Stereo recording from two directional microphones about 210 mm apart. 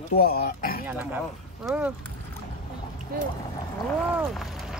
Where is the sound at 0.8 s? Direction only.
10° right (ahead or behind).